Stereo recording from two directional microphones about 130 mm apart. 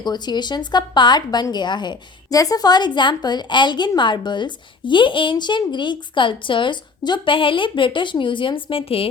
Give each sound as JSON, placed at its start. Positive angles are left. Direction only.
{"t": 0.0, "sound": "a woman's voice", "side_deg": 35}